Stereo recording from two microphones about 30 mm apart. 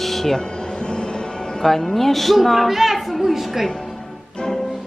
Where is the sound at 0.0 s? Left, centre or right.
Centre.